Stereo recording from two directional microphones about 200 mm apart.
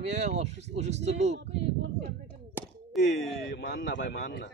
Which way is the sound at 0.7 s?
35° right (ahead or behind).